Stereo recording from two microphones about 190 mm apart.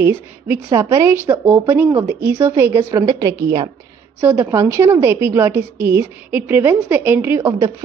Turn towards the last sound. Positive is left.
turn(degrees=-10)  # may be behind; listen again after turning